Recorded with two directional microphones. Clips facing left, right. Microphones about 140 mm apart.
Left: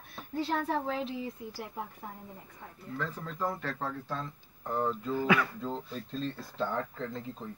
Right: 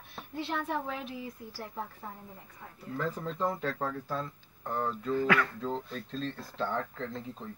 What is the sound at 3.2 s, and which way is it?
Speech, 20° right (ahead or behind).